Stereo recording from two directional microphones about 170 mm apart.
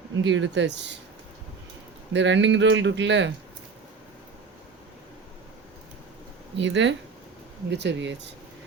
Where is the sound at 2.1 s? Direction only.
90° right.